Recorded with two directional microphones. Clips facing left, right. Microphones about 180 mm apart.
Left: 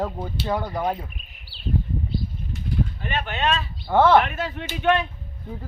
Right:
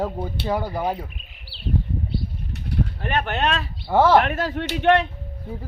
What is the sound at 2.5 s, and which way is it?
Bird, 65° right (ahead or behind).